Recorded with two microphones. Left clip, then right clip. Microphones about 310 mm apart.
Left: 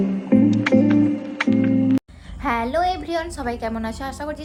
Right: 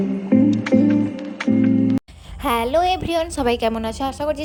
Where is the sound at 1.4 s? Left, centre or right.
Centre.